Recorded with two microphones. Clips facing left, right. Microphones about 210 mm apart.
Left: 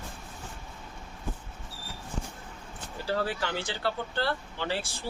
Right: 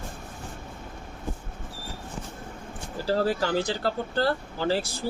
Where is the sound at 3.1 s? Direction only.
40° right (ahead or behind).